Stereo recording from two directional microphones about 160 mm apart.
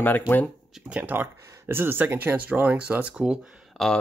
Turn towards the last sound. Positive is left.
turn(degrees=-5)  # may be behind; listen again after turning